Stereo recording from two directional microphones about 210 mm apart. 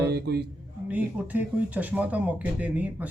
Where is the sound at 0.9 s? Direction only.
5° right (ahead or behind).